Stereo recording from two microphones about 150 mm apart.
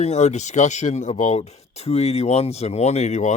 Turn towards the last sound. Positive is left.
turn(degrees=50)  # may be behind; listen again after turning